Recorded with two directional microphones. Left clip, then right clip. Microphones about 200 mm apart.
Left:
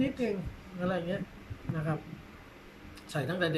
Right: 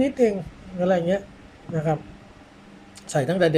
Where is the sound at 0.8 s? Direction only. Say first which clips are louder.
Right 12 dB; 35° right (ahead or behind).